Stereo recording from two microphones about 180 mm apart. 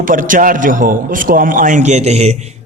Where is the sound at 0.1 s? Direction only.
50° right (ahead or behind).